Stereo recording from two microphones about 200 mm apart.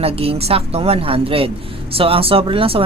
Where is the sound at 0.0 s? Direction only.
30° right (ahead or behind).